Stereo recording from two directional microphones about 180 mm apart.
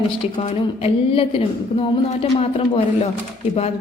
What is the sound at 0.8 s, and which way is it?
A woman's voice, 30° left (ahead or behind).